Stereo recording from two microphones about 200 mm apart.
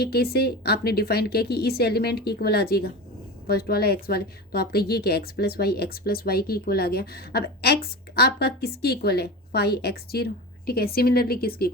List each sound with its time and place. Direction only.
0.0 s a woman's voice: 50° left (ahead or behind)